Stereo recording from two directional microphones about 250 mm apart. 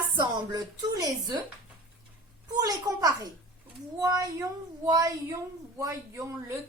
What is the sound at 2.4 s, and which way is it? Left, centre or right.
A child's voice, centre.